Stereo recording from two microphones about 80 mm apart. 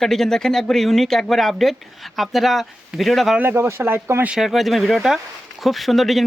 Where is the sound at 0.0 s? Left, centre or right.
Centre.